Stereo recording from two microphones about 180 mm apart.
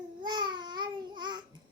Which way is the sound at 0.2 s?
25° right (ahead or behind).